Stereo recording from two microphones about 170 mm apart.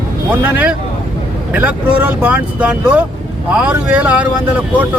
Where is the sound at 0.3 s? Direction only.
10° right (ahead or behind).